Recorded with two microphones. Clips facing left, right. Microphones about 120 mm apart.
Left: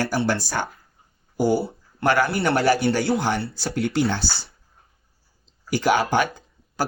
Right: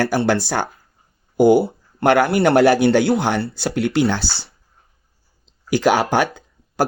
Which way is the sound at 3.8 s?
85° right.